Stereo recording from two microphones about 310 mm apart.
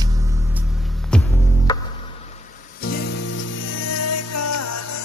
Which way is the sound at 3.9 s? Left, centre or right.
Left.